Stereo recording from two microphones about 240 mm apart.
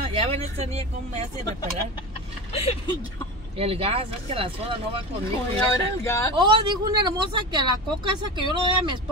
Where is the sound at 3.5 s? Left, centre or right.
Right.